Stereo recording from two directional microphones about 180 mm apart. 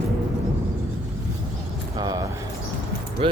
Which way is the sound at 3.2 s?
30° right (ahead or behind).